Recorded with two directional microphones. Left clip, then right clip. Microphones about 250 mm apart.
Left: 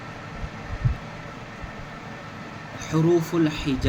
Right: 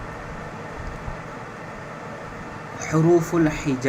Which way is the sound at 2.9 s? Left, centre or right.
Centre.